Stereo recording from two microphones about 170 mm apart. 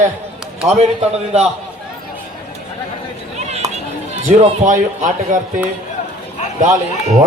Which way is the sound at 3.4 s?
40° right (ahead or behind).